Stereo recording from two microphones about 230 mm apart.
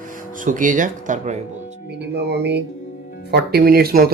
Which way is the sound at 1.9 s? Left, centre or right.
Right.